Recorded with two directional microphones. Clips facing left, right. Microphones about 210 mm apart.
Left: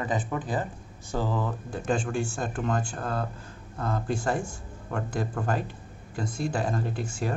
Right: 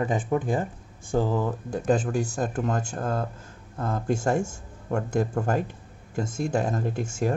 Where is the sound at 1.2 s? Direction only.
15° right (ahead or behind).